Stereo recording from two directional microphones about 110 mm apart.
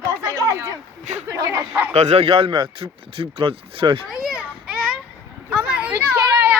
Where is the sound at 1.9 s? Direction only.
75° right (ahead or behind); by 4.0 s 55° right (ahead or behind).